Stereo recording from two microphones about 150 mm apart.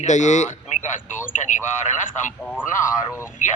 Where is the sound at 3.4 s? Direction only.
60° left (ahead or behind).